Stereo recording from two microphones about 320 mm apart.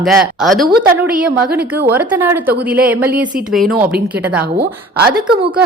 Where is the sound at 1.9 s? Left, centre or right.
Centre.